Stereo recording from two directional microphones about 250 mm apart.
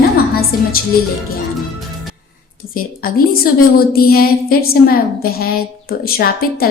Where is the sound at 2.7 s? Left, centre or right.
Left.